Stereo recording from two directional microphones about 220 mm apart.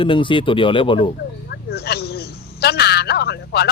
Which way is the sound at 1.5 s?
45° left (ahead or behind).